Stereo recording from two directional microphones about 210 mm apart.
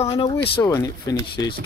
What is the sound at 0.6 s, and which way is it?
Speech, 15° left (ahead or behind).